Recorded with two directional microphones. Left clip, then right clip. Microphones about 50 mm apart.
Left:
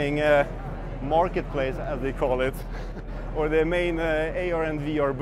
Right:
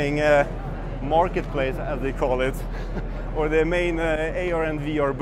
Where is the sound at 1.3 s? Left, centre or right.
Left.